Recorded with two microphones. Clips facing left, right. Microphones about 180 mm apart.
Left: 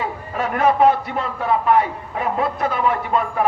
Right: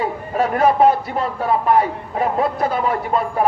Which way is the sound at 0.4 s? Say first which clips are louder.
Right 2 dB; 35° right (ahead or behind).